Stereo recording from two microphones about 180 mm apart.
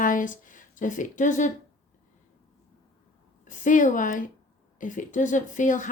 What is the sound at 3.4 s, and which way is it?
Speech, 45° left (ahead or behind).